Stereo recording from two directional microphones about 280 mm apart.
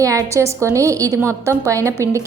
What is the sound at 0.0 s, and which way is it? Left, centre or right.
A woman's voice, centre.